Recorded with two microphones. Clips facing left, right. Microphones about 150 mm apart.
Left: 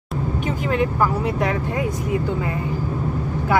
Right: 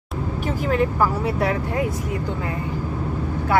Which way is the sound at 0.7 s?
Centre (ahead or behind).